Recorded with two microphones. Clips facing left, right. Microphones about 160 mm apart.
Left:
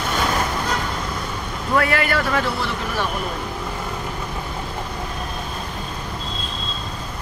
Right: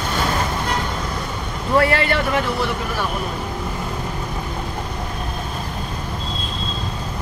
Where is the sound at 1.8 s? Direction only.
30° right (ahead or behind).